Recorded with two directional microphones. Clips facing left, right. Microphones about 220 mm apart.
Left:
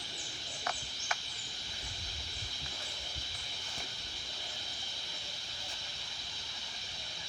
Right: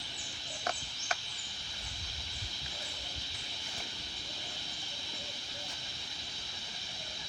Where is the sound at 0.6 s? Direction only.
40° right (ahead or behind).